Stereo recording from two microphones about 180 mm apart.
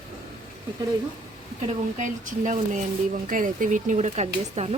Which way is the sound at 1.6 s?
45° right (ahead or behind).